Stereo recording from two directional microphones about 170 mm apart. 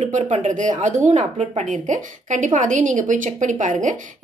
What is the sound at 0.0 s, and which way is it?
A woman's voice, 45° right (ahead or behind).